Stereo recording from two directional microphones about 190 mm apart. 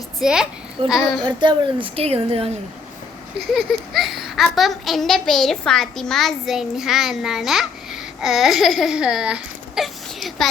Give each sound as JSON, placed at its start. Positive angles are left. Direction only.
{"t": 0.2, "sound": "a child's voice", "side_deg": -5}
{"t": 1.2, "sound": "a woman's voice", "side_deg": -25}
{"t": 3.5, "sound": "a child's voice", "side_deg": 0}